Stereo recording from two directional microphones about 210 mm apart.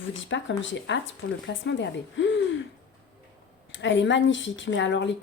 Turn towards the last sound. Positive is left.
turn(degrees=60)  # may be behind; listen again after turning